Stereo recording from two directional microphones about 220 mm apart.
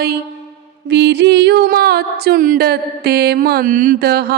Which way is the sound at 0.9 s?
50° right (ahead or behind).